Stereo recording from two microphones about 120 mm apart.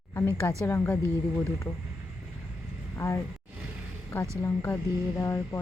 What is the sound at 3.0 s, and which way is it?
Speech, 20° left (ahead or behind).